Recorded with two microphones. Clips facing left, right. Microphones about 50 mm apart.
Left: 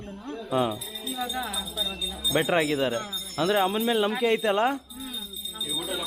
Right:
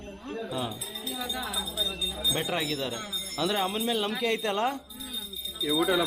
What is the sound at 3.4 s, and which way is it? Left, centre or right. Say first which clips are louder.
Speech: left 5 dB; centre.